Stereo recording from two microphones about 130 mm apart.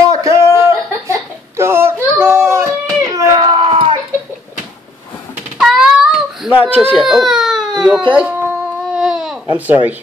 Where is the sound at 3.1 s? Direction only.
35° right (ahead or behind).